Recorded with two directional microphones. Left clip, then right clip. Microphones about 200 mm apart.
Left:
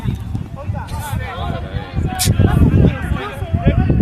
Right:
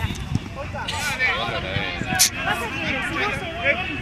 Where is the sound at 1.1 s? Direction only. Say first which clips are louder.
Right 6 dB; 50° left (ahead or behind).